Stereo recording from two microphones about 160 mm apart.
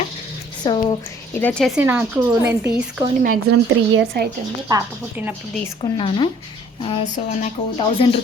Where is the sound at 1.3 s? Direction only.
10° left (ahead or behind).